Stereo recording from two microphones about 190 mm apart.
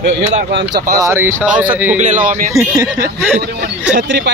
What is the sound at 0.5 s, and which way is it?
Speech, 65° right (ahead or behind).